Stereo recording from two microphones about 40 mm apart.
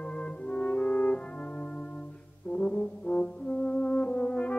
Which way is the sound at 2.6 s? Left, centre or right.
Left.